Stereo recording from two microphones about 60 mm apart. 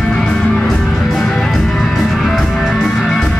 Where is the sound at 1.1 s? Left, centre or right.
Centre.